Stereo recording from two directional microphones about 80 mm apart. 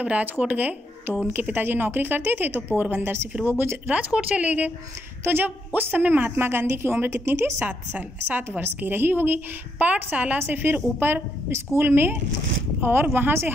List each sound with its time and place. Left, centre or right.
0.0 s a woman's voice: centre